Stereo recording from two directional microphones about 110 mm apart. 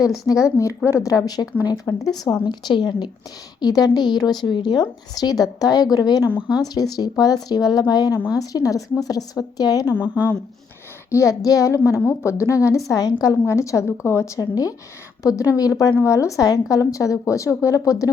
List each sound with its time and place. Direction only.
0.0 s a woman's voice: 30° left (ahead or behind)
10.0 s speech: 15° right (ahead or behind)
11.1 s a woman's voice: 30° left (ahead or behind)